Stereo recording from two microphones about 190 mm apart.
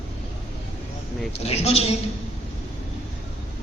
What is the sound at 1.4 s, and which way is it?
Speech, 35° left (ahead or behind).